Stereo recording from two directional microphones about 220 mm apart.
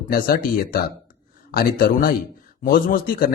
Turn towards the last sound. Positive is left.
turn(degrees=40)  # may be behind; listen again after turning